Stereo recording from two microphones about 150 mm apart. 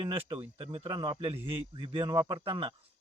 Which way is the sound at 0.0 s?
35° right (ahead or behind).